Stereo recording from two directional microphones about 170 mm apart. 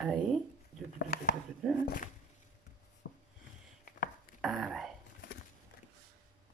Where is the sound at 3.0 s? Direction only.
70° left (ahead or behind).